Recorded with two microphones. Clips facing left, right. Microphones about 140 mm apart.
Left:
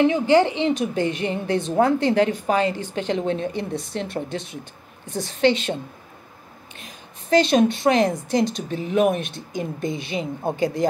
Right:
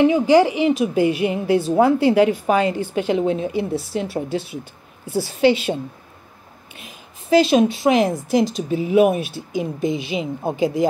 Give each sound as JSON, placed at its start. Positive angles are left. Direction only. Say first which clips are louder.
{"t": 0.0, "sound": "a woman's voice", "louder": "right 3 dB", "side_deg": -10}
{"t": 7.2, "sound": "speech", "louder": "right 2 dB", "side_deg": -5}
{"t": 10.1, "sound": "a woman's voice", "louder": "right 3 dB", "side_deg": -15}